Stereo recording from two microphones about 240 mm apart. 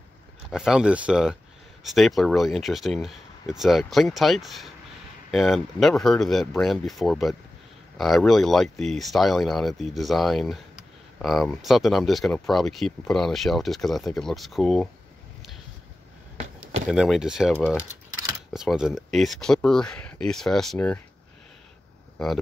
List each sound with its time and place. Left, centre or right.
0.5 s speech: centre
16.3 s a sound: right
16.9 s speech: centre
18.5 s speech: centre
22.2 s speech: centre